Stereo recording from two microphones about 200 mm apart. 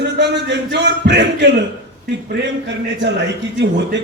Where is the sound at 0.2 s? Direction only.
60° right (ahead or behind).